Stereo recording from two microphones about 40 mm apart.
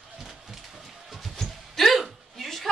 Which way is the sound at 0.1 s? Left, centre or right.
Centre.